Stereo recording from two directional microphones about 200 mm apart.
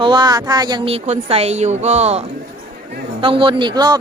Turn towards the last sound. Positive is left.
turn(degrees=-20)  # may be behind; listen again after turning